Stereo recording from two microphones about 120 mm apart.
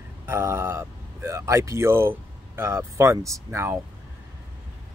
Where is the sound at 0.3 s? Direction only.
20° right (ahead or behind).